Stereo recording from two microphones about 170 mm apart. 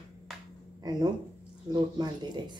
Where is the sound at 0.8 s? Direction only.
25° right (ahead or behind).